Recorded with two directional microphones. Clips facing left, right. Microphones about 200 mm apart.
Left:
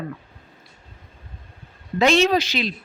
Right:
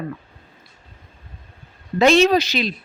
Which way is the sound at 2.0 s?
40° right (ahead or behind).